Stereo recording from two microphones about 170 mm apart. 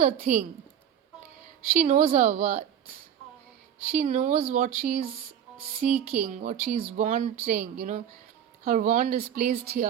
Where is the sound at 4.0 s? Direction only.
50° right (ahead or behind).